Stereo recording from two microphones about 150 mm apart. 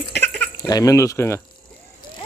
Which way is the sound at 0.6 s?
25° left (ahead or behind).